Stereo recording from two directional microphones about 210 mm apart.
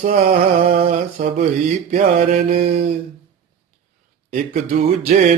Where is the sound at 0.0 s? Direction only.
40° right (ahead or behind).